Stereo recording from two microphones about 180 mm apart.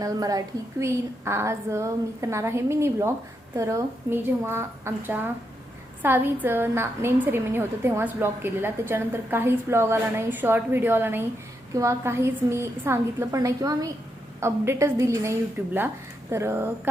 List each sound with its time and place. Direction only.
0.0 s a woman's voice: 20° right (ahead or behind)